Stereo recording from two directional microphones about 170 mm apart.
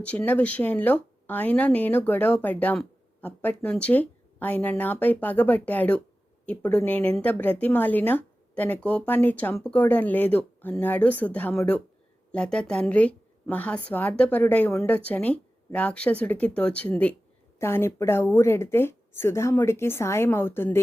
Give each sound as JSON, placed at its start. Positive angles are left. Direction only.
{"t": 0.0, "sound": "speech", "side_deg": 10}